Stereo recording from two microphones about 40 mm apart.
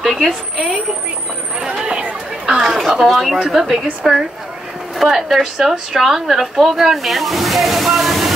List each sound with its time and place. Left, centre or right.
0.0 s speech: centre
1.8 s chatter: right
2.4 s speech: centre
3.1 s a woman's voice: centre